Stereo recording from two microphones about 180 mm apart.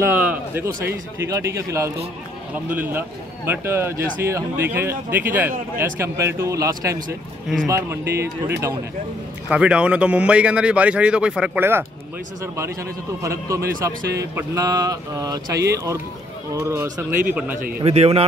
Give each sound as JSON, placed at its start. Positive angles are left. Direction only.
{"t": 0.1, "sound": "a man's voice", "side_deg": -10}
{"t": 13.2, "sound": "a man's voice", "side_deg": -15}
{"t": 17.8, "sound": "speech", "side_deg": -35}